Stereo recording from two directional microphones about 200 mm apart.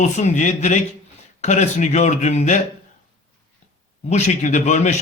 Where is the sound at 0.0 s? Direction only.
35° left (ahead or behind).